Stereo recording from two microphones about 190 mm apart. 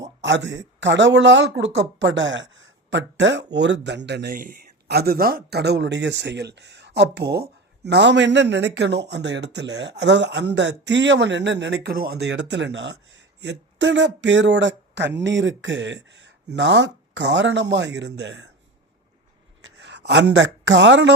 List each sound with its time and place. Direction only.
0.2 s speech: 70° right (ahead or behind)
19.6 s speech: 65° right (ahead or behind)